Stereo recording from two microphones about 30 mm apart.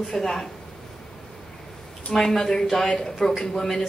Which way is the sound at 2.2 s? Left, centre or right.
Centre.